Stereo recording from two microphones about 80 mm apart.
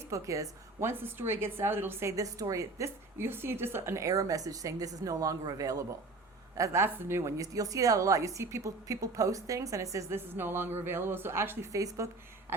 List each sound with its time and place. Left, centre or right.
0.1 s a woman's voice: right
2.1 s a woman's voice: right
4.0 s a woman's voice: right
6.6 s a woman's voice: right
7.3 s a woman's voice: right
10.2 s speech: right
11.7 s a woman's voice: right
12.5 s throat clearing: right